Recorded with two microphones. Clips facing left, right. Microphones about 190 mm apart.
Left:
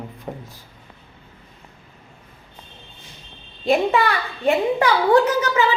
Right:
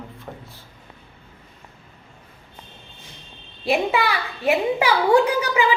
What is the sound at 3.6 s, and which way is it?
A woman's voice, 5° right (ahead or behind).